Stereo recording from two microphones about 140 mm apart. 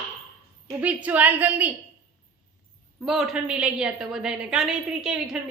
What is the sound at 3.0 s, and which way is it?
A woman's voice, 5° right (ahead or behind).